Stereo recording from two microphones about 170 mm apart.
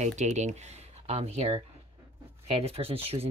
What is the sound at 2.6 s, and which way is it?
Speech, 35° right (ahead or behind).